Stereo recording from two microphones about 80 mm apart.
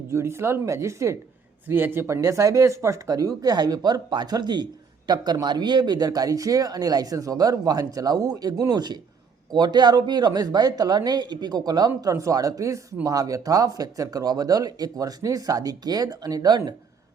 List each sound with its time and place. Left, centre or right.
0.1 s speech: right
1.6 s speech: right